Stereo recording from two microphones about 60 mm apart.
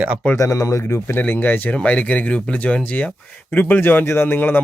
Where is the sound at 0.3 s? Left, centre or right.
Left.